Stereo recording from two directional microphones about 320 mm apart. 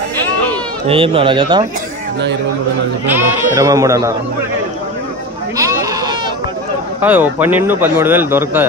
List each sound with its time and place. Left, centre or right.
0.8 s a man's voice: centre
3.1 s a man's voice: centre
5.6 s goat: centre
7.0 s a man's voice: centre